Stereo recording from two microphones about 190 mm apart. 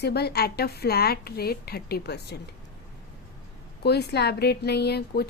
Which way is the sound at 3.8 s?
60° left (ahead or behind).